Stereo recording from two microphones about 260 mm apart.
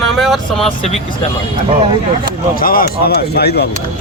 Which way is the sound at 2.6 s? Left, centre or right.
Left.